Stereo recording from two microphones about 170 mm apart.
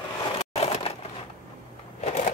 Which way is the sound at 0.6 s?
35° left (ahead or behind).